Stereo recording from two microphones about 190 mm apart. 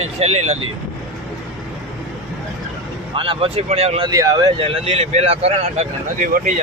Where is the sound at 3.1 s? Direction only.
30° right (ahead or behind).